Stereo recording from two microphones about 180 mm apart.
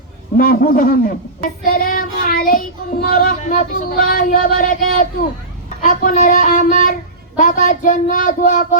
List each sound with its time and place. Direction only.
0.3 s child singing: 55° left (ahead or behind)